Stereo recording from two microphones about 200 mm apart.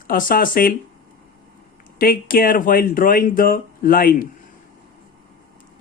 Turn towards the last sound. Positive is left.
turn(degrees=45)  # may be behind; listen again after turning